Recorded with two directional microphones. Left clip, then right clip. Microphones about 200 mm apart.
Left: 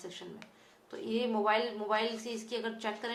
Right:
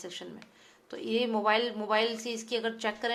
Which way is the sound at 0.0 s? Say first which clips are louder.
Right 3 dB; 45° right (ahead or behind).